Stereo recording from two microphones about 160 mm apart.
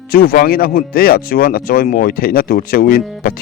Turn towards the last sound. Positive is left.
turn(degrees=65)  # may be behind; listen again after turning